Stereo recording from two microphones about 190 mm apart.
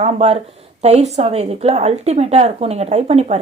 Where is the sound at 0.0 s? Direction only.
35° right (ahead or behind).